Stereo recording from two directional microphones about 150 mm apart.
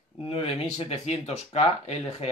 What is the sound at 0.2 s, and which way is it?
Speech, 40° left (ahead or behind).